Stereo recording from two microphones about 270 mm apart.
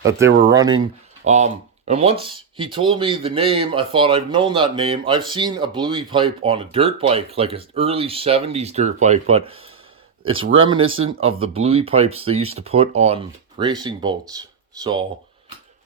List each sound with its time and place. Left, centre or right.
0.0 s speech: centre
1.2 s speech: right